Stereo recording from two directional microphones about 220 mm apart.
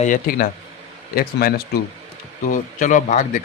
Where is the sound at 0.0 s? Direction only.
40° left (ahead or behind).